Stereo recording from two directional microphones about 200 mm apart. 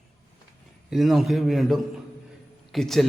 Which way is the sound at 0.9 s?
Centre (ahead or behind).